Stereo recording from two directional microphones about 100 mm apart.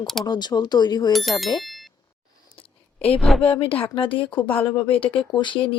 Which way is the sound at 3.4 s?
65° left (ahead or behind).